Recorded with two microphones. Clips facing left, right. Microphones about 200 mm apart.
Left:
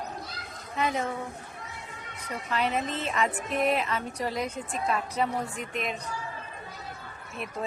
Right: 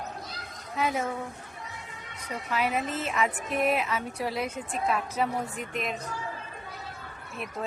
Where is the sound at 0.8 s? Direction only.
5° right (ahead or behind).